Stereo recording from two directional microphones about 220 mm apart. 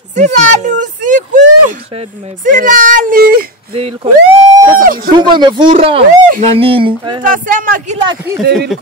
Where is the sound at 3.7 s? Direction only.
25° right (ahead or behind).